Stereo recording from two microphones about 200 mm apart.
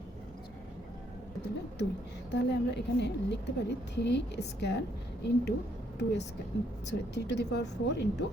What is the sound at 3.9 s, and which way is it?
Speech, 60° left (ahead or behind).